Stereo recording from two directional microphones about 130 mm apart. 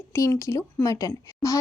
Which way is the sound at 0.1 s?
20° left (ahead or behind).